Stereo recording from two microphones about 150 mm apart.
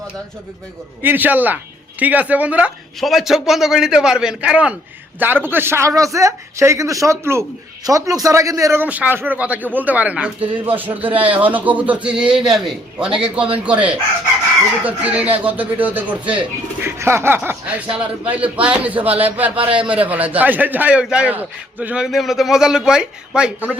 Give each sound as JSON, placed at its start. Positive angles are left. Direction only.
{"t": 1.0, "sound": "a man's voice", "side_deg": -10}